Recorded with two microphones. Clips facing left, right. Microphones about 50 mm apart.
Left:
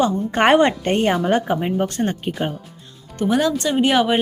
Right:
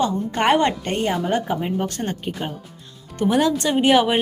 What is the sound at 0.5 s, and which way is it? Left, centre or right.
Speech, centre.